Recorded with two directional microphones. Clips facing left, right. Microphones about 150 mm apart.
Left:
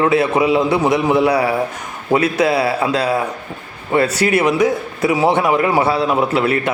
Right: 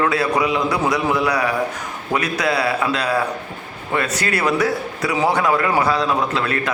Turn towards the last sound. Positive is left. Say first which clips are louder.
# left 5 dB
turn(degrees=25)  # may be behind; listen again after turning